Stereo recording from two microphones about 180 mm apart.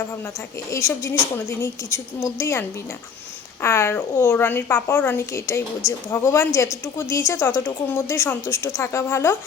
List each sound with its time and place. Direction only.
0.7 s a woman's voice: 15° left (ahead or behind)